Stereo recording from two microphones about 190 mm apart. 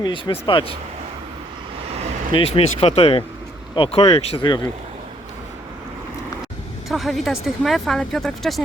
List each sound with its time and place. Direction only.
0.0 s speech: 25° left (ahead or behind)
2.3 s speech: 30° left (ahead or behind)
6.8 s speech: centre (ahead or behind)